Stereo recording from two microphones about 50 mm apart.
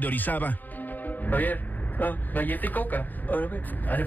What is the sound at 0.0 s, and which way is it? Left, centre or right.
A man's voice, left.